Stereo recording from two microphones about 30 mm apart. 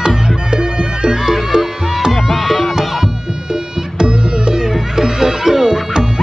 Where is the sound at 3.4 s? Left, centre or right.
Right.